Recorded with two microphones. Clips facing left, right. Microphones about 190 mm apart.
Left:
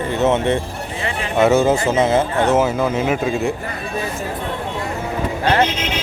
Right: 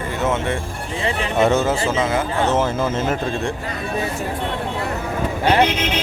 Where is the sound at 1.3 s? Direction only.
Centre (ahead or behind).